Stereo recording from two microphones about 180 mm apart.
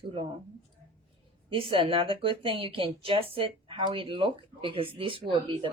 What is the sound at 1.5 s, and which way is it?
A woman's voice, 30° right (ahead or behind).